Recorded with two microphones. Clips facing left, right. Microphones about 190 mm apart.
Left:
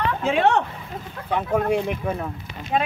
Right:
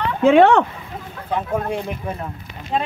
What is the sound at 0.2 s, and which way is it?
Speech, 80° right.